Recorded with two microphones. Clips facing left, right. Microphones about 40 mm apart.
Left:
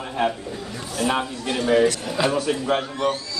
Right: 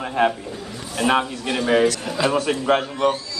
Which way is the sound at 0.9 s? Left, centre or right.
Right.